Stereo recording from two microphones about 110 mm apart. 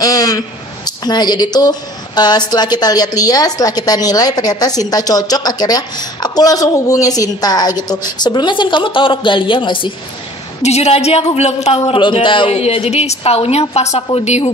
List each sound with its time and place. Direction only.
0.0 s a man's voice: 35° left (ahead or behind)
10.6 s speech: 75° left (ahead or behind)
14.2 s speech: 90° left